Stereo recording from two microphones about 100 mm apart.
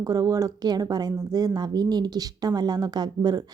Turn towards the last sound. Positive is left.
turn(degrees=-45)  # may be behind; listen again after turning